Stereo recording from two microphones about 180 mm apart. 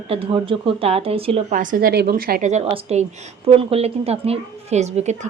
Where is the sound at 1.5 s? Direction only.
50° right (ahead or behind).